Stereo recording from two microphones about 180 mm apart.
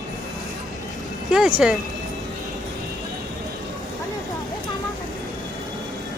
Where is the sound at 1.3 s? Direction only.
5° right (ahead or behind).